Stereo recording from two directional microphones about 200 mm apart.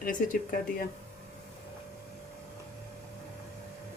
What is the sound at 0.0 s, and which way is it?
Speech, 45° left (ahead or behind).